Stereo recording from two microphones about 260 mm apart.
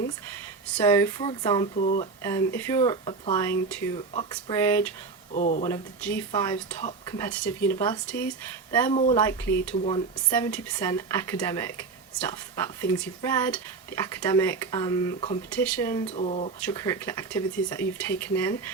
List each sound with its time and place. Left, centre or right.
0.9 s speech: centre
1.8 s speech: left
2.2 s speech: centre
3.9 s speech: left
4.5 s speech: centre
5.3 s speech: left
5.6 s speech: centre
8.9 s speech: left
9.2 s speech: centre
10.3 s speech: centre
16.0 s speech: left
16.6 s speech: centre